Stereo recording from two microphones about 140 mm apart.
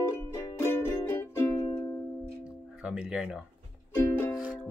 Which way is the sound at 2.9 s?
5° right (ahead or behind).